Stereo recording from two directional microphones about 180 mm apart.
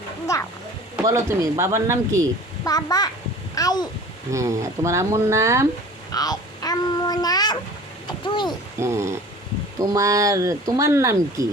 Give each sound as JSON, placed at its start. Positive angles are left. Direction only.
{"t": 0.3, "sound": "speech", "side_deg": 15}
{"t": 1.0, "sound": "speech", "side_deg": -15}
{"t": 2.6, "sound": "a child's voice", "side_deg": 20}
{"t": 4.3, "sound": "speech", "side_deg": -15}
{"t": 6.1, "sound": "a child's voice", "side_deg": 20}
{"t": 8.0, "sound": "a sound", "side_deg": 25}
{"t": 8.8, "sound": "speech", "side_deg": -15}